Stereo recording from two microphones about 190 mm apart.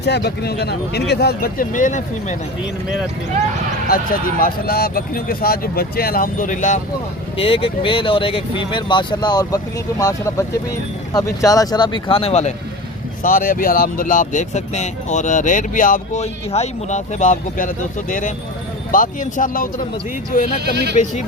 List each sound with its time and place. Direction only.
0.0 s speech: 60° left (ahead or behind); by 2.0 s 40° left (ahead or behind)
3.8 s speech: 50° left (ahead or behind)
7.3 s speech: 30° left (ahead or behind)
13.2 s speech: 45° left (ahead or behind)
20.9 s speech: 40° left (ahead or behind)